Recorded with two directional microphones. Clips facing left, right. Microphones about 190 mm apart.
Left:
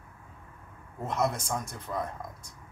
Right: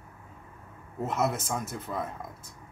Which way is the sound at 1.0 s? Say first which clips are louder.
Right 1 dB; 5° right (ahead or behind).